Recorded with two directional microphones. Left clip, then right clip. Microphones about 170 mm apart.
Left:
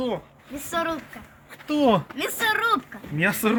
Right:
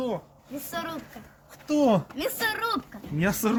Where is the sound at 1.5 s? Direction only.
5° left (ahead or behind).